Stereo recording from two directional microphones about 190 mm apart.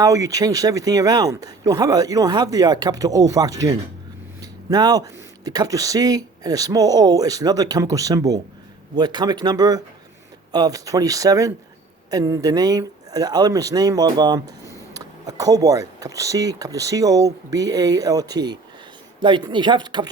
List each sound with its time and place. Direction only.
0.0 s speech: 15° right (ahead or behind)
14.6 s a sound: 15° left (ahead or behind)
14.9 s speech: 20° right (ahead or behind)